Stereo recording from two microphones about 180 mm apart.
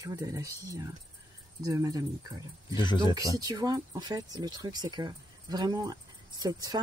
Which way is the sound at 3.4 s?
20° right (ahead or behind).